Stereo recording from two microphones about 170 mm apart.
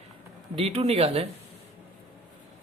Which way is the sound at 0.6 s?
35° right (ahead or behind).